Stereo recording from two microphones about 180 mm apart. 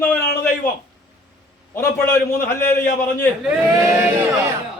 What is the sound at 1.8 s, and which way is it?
A man's voice, 15° left (ahead or behind).